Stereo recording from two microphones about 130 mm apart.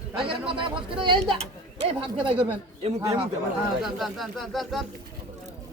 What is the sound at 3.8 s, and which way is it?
Speech, centre (ahead or behind).